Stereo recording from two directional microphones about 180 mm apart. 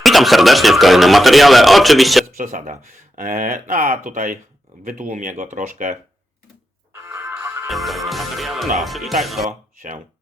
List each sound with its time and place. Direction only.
0.0 s speech: centre (ahead or behind)
2.3 s speech: 50° right (ahead or behind)
6.9 s music: 10° right (ahead or behind)
7.7 s speech: centre (ahead or behind)
9.5 s speech: 45° right (ahead or behind)